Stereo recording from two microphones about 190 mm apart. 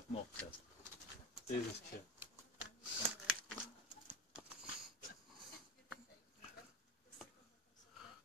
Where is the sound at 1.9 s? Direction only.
50° left (ahead or behind).